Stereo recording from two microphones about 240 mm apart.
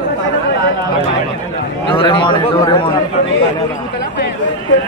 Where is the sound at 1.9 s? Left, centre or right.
Centre.